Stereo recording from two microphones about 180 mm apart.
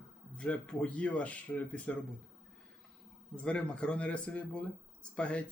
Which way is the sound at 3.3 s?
5° left (ahead or behind).